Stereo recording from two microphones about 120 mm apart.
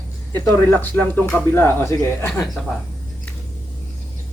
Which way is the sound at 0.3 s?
20° left (ahead or behind).